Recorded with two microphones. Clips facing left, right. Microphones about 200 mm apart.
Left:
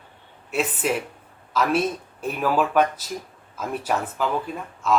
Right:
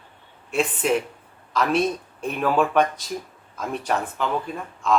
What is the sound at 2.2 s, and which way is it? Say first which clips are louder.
Speech: right 1 dB; 5° left (ahead or behind).